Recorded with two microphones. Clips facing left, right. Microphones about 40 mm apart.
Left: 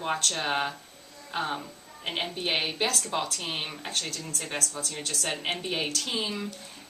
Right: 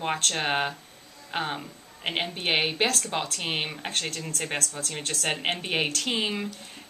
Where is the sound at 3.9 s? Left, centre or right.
Right.